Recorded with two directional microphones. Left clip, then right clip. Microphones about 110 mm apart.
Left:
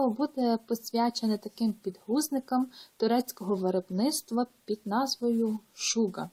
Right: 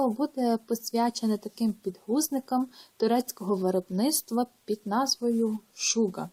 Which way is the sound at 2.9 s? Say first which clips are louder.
Right 2 dB; 35° right (ahead or behind).